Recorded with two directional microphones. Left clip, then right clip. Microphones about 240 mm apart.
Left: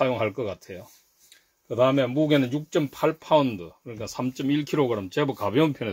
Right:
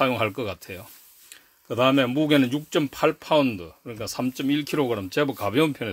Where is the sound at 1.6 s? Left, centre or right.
Right.